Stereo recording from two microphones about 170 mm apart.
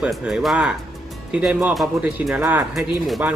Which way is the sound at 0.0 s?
5° right (ahead or behind).